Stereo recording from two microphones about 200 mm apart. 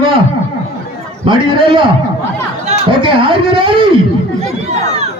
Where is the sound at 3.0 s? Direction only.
25° right (ahead or behind).